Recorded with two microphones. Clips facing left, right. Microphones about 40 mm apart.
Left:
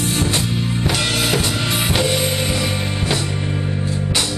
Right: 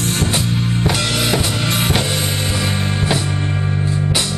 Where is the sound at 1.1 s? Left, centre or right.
Centre.